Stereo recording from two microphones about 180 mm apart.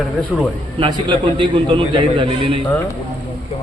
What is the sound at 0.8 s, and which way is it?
A man's voice, 25° right (ahead or behind).